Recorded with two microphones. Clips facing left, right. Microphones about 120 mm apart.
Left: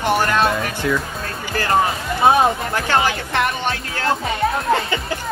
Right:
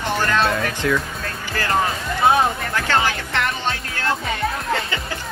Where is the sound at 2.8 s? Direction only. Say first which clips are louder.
Left 2 dB; 15° left (ahead or behind).